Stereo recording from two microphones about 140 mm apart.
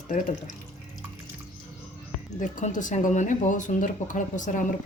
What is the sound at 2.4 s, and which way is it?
Speech, 65° left (ahead or behind).